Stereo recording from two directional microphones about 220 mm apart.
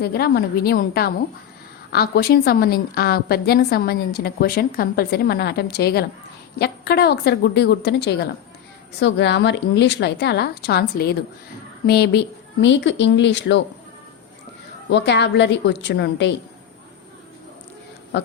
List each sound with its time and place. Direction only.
0.0 s a woman's voice: 45° left (ahead or behind)
14.8 s a woman's voice: 50° left (ahead or behind)